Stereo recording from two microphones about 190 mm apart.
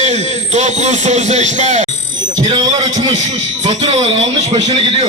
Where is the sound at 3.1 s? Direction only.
35° right (ahead or behind).